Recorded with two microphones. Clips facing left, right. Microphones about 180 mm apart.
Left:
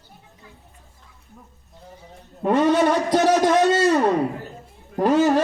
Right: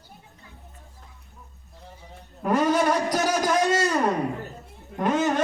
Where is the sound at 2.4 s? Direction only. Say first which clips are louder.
Left 4 dB; 25° left (ahead or behind).